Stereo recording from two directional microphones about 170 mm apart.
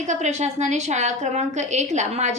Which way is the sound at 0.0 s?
45° right (ahead or behind).